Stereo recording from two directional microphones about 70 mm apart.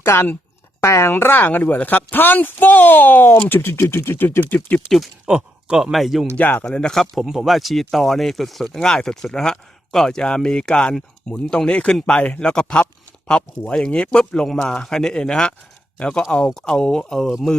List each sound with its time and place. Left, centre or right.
0.0 s speech: left
0.8 s speech: left
1.1 s speech: left
5.2 s a sound: centre
5.8 s speech: centre
6.3 s speech: left
6.7 s speech: centre